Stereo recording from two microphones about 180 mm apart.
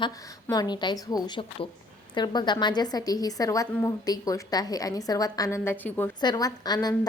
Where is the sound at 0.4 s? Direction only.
20° left (ahead or behind).